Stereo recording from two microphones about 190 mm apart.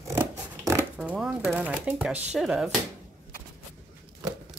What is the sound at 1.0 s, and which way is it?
Speech, 5° right (ahead or behind).